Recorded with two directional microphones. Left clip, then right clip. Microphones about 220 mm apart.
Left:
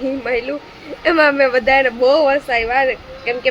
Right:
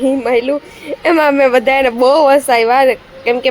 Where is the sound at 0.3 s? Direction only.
25° right (ahead or behind).